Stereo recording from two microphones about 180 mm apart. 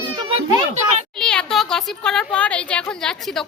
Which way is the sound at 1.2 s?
5° left (ahead or behind).